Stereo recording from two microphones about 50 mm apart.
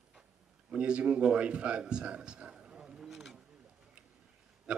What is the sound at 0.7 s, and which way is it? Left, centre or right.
A man's voice, right.